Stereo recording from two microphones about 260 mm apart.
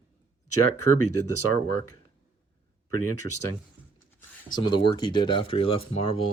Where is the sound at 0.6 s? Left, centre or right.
Left.